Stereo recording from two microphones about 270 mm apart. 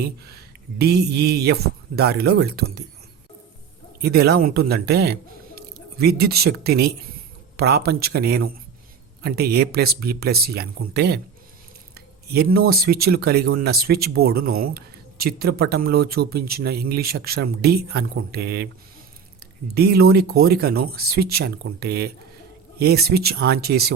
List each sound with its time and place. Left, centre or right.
0.8 s speech: right
4.0 s speech: right
19.7 s speech: right